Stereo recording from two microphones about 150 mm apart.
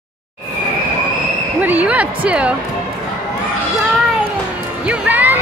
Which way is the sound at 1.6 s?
10° right (ahead or behind).